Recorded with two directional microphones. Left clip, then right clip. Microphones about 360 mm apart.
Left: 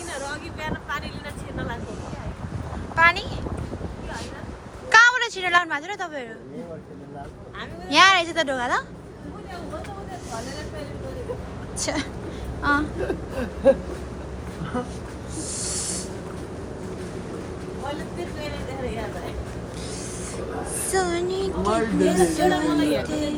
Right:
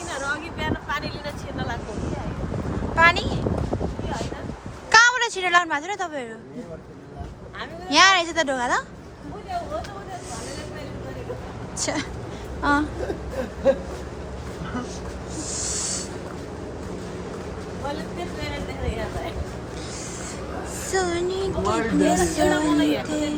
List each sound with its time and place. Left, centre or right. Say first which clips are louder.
0.1 s music: right 5 dB; right
2.9 s speech: right 1 dB; centre
4.9 s a child's voice: even; centre
7.9 s a woman's voice: even; centre
11.8 s a woman's voice: even; centre
20.9 s a woman's voice: even; centre